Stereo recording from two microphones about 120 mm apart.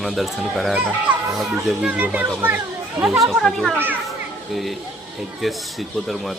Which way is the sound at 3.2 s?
Centre (ahead or behind).